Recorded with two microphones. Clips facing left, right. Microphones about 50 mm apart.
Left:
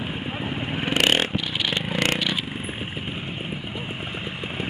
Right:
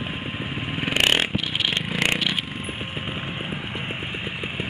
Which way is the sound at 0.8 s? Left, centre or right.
Centre.